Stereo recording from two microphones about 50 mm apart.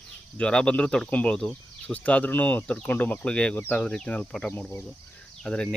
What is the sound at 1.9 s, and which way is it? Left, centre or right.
Speech, left.